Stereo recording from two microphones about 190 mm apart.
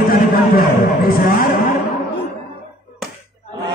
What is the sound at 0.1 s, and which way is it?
A man's voice, 50° left (ahead or behind).